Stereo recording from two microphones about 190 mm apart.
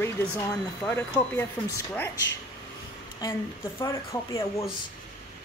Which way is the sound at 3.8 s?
15° left (ahead or behind).